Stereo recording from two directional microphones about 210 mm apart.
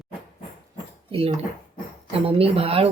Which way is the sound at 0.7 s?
25° right (ahead or behind).